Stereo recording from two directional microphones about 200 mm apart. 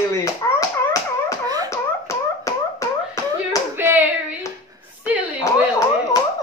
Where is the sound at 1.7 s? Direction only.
15° left (ahead or behind).